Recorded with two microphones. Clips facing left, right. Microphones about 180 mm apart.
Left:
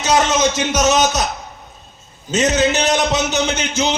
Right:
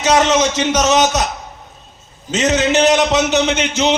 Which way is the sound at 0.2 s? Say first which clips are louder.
Right 2 dB; 75° right (ahead or behind).